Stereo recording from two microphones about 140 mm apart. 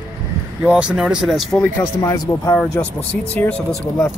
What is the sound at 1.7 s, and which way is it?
Speech, 25° left (ahead or behind).